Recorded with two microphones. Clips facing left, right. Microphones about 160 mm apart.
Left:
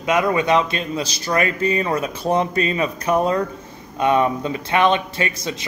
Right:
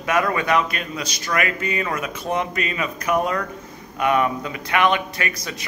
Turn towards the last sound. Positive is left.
turn(degrees=25)  # may be behind; listen again after turning